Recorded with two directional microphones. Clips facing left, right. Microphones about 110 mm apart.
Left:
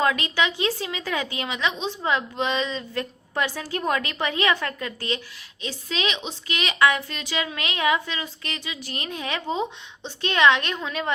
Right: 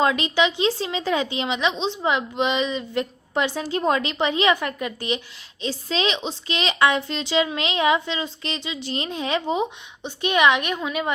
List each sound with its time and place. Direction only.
0.0 s a woman's voice: 20° right (ahead or behind)
5.6 s a woman's voice: 30° right (ahead or behind); by 11.1 s 10° right (ahead or behind)